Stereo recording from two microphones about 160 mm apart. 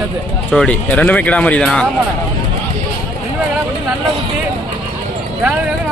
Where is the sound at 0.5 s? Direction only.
5° left (ahead or behind).